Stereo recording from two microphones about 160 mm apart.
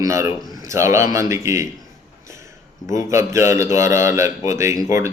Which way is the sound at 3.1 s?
20° right (ahead or behind).